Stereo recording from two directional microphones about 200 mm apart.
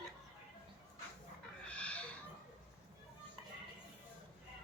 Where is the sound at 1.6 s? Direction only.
5° left (ahead or behind).